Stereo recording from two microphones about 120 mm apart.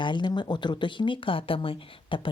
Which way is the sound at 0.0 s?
40° left (ahead or behind).